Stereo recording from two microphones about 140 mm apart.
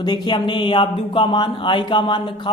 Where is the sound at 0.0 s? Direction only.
30° left (ahead or behind).